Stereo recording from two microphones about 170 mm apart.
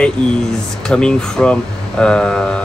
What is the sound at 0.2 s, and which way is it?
Speech, 5° left (ahead or behind).